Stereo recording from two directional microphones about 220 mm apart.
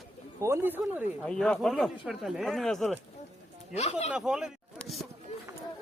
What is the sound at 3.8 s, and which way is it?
Speech, 30° left (ahead or behind).